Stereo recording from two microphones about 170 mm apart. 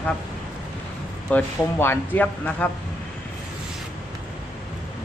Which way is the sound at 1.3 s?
10° left (ahead or behind).